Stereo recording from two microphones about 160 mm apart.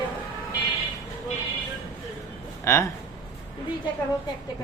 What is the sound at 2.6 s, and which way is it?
Speech, 15° left (ahead or behind).